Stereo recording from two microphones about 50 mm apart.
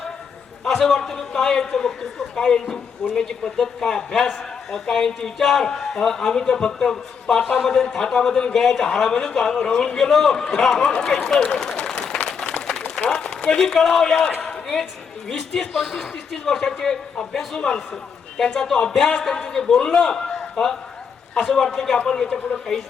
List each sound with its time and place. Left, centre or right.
0.6 s a man's voice: centre
12.0 s a sound: centre
12.6 s run: centre
13.1 s a man's voice: centre
14.3 s a sound: centre
15.3 s a man's voice: centre